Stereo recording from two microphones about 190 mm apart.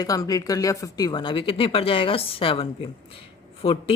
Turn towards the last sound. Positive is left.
turn(degrees=30)  # may be behind; listen again after turning